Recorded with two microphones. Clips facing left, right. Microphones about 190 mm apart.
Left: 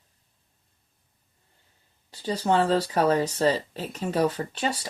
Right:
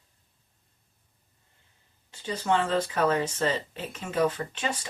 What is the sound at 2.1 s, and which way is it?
Speech, 35° left (ahead or behind).